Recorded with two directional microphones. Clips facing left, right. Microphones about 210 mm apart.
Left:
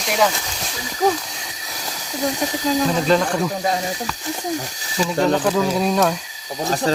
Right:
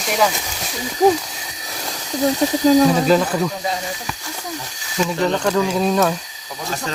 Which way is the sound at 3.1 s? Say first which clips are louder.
Right 2 dB; 5° right (ahead or behind).